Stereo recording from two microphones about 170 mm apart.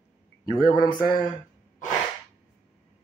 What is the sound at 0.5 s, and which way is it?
Speech, 25° left (ahead or behind).